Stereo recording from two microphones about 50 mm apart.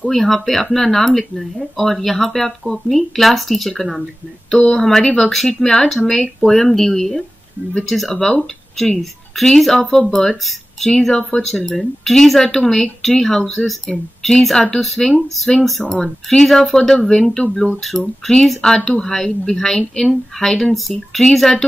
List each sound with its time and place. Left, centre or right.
0.0 s speech: centre
4.6 s speech: centre
4.8 s speech: centre
8.1 s speech: centre